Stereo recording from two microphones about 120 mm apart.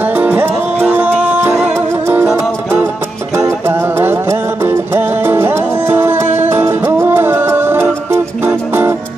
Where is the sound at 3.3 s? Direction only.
20° right (ahead or behind).